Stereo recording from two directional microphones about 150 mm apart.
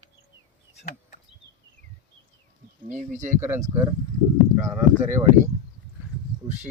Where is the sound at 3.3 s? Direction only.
15° right (ahead or behind).